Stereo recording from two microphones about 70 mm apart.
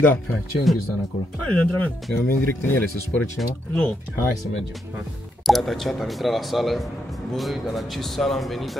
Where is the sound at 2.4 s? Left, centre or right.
Left.